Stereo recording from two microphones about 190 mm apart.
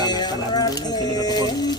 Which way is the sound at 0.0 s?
20° left (ahead or behind).